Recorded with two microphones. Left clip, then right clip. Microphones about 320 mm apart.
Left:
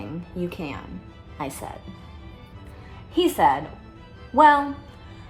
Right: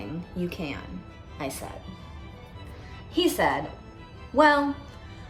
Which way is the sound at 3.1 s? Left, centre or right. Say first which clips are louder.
Left 5 dB; centre.